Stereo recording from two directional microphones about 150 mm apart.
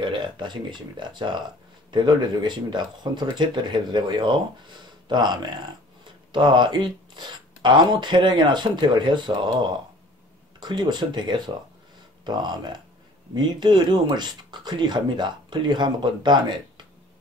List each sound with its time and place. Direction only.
0.0 s speech: 30° right (ahead or behind)
10.6 s speech: 30° right (ahead or behind)